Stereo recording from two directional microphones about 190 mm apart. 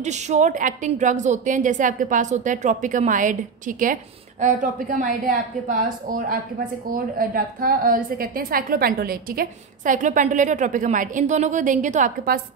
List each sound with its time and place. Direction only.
0.0 s a woman's voice: 40° right (ahead or behind)